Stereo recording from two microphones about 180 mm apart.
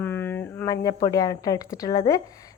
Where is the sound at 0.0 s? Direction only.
10° left (ahead or behind).